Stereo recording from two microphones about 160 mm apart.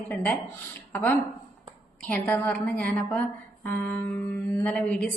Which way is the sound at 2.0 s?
10° left (ahead or behind).